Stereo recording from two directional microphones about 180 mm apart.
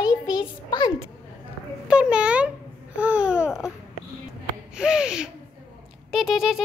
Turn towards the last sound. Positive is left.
turn(degrees=0)  # may be behind; listen again after turning